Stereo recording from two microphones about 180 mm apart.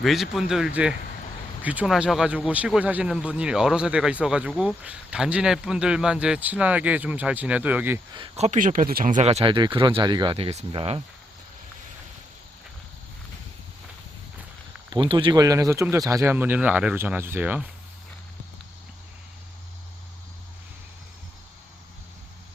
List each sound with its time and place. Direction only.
0.0 s speech: centre (ahead or behind)
8.1 s speech: 25° right (ahead or behind)
8.4 s speech: 45° right (ahead or behind); by 11.0 s 30° right (ahead or behind)
14.8 s speech: 25° right (ahead or behind); by 17.7 s 10° right (ahead or behind)